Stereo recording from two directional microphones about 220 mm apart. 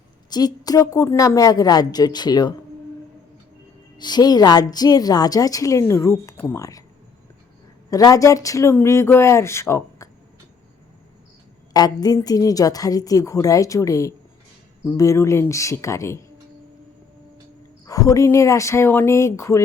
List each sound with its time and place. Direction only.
0.3 s a woman's voice: 20° left (ahead or behind)
3.9 s a woman's voice: 20° left (ahead or behind)
7.9 s a woman's voice: 15° left (ahead or behind)
11.7 s a woman's voice: 15° left (ahead or behind)
17.8 s a woman's voice: 15° left (ahead or behind)